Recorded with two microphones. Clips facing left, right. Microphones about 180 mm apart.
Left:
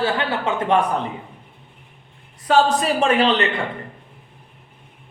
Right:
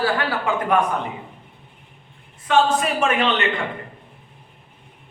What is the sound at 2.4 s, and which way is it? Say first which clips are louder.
A man's voice: left 1 dB; 35° left (ahead or behind).